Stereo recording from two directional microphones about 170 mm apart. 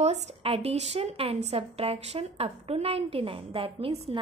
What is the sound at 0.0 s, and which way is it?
A woman's voice, 40° right (ahead or behind).